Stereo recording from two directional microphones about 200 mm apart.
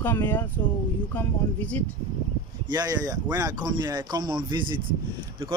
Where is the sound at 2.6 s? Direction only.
20° right (ahead or behind).